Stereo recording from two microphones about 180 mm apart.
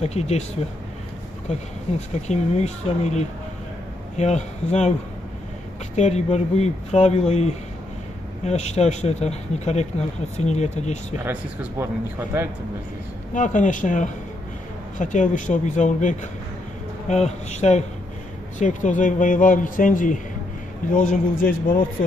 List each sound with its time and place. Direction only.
0.0 s speech: 35° left (ahead or behind)
2.0 s speech: 40° left (ahead or behind)
5.9 s speech: 40° left (ahead or behind)
11.8 s speech: 15° right (ahead or behind)
13.3 s a man's voice: 45° left (ahead or behind)